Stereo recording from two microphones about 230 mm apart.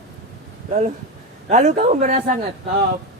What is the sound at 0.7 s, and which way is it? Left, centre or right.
A man's voice, right.